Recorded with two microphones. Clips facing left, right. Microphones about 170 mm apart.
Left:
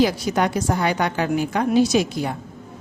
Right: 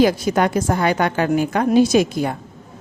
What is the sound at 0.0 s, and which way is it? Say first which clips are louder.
A woman's voice: right 3 dB; 50° right (ahead or behind).